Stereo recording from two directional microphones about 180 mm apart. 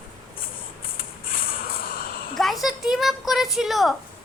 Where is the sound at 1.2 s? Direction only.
50° left (ahead or behind).